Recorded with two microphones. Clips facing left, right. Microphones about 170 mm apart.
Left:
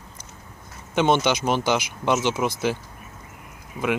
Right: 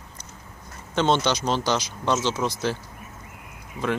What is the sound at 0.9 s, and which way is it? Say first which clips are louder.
Speech: left 2 dB; 10° left (ahead or behind).